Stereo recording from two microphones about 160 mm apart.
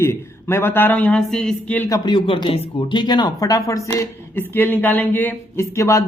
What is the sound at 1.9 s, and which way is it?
Speech, 30° left (ahead or behind).